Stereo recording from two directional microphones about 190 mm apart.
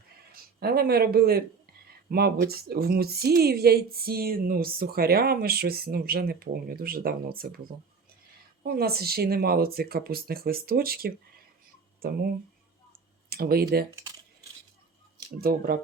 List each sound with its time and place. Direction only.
0.6 s a woman's voice: 55° right (ahead or behind)
8.6 s a woman's voice: 55° right (ahead or behind)
13.3 s a woman's voice: 55° right (ahead or behind)
15.4 s a woman's voice: 50° right (ahead or behind)